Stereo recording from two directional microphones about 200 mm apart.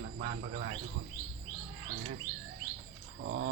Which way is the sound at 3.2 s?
55° right (ahead or behind).